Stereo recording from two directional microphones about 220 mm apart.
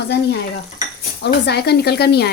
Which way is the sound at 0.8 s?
45° left (ahead or behind).